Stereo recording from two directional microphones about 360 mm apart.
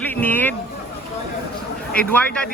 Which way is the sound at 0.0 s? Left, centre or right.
Centre.